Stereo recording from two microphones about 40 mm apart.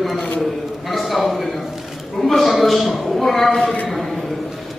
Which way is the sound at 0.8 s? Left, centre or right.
Centre.